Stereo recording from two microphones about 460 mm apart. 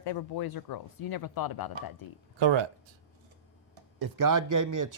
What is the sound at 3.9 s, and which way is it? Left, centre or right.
Speech, right.